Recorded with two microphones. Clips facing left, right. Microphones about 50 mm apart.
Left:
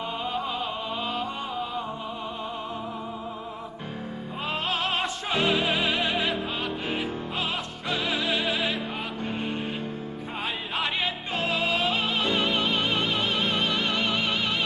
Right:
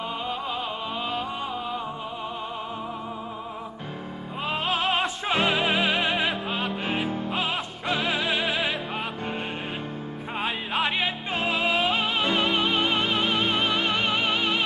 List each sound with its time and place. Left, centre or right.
4.4 s music: centre